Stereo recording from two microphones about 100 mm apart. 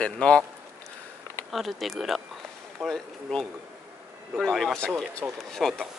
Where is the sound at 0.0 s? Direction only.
10° left (ahead or behind).